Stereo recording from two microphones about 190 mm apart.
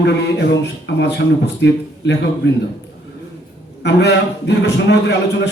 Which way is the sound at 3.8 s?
65° left (ahead or behind).